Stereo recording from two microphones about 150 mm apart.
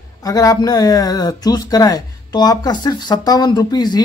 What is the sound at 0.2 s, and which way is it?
Speech, 25° left (ahead or behind).